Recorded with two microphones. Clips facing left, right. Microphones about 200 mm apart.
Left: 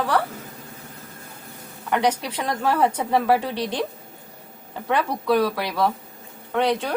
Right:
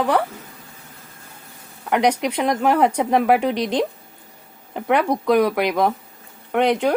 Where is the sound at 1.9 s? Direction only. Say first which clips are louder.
Right 4 dB; 15° right (ahead or behind).